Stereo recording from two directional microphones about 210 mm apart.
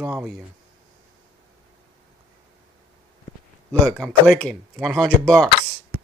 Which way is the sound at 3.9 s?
5° left (ahead or behind).